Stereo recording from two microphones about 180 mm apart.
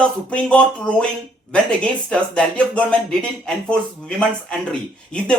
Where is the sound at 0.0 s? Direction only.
5° left (ahead or behind).